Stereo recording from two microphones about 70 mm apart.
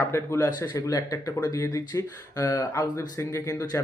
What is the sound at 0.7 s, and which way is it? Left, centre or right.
Speech, left.